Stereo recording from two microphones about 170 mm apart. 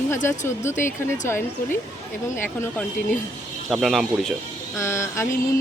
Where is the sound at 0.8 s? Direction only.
50° left (ahead or behind).